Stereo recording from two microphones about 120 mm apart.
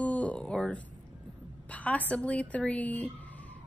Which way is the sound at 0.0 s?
10° left (ahead or behind).